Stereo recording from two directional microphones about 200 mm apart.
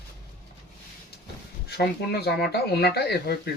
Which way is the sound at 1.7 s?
55° left (ahead or behind).